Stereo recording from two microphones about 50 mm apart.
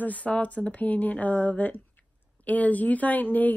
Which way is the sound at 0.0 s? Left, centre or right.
Left.